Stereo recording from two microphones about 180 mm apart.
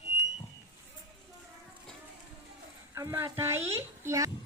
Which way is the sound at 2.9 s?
15° right (ahead or behind).